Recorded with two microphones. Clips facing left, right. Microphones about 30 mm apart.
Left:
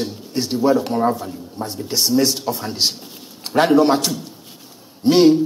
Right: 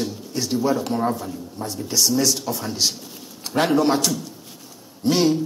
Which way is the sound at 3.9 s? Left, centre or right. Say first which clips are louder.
Left 1 dB; left.